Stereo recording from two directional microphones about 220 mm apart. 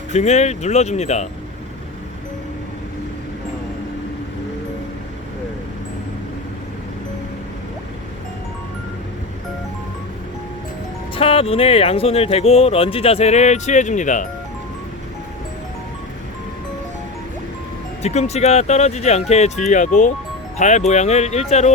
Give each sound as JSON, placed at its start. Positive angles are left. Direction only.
{"t": 0.1, "sound": "speech", "side_deg": 30}
{"t": 11.1, "sound": "speech", "side_deg": 25}
{"t": 18.0, "sound": "speech", "side_deg": 30}